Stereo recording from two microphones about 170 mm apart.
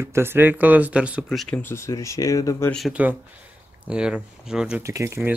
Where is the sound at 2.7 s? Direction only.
5° right (ahead or behind).